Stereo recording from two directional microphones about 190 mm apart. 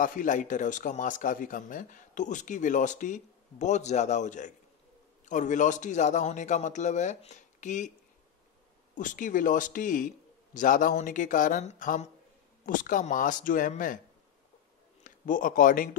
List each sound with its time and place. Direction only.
0.0 s a man's voice: 45° left (ahead or behind)
8.9 s a man's voice: 45° left (ahead or behind)
15.0 s speech: 45° left (ahead or behind)